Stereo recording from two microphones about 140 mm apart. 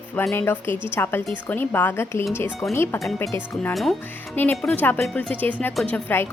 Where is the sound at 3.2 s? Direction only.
20° left (ahead or behind).